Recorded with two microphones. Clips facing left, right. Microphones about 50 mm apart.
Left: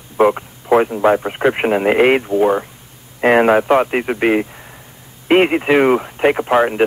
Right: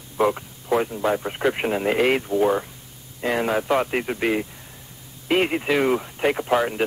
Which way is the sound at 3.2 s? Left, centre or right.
Left.